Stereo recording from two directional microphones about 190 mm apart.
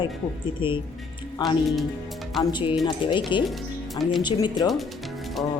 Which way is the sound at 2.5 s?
25° left (ahead or behind).